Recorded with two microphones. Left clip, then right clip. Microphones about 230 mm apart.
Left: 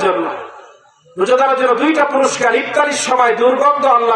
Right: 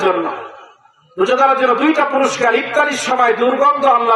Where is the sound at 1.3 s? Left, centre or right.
Right.